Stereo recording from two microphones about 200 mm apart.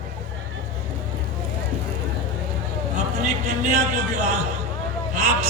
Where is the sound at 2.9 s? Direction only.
35° right (ahead or behind).